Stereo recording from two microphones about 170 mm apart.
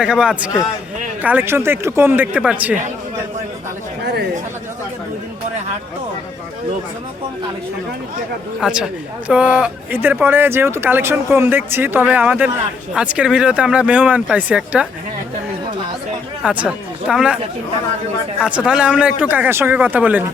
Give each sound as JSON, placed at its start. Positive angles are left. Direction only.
{"t": 0.0, "sound": "a man's voice", "side_deg": -5}
{"t": 4.0, "sound": "chatter", "side_deg": -80}
{"t": 8.6, "sound": "a man's voice", "side_deg": -5}
{"t": 16.4, "sound": "speech", "side_deg": -5}
{"t": 18.3, "sound": "a man's voice", "side_deg": -5}